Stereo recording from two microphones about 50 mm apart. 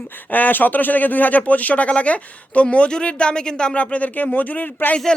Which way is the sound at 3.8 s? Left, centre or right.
Left.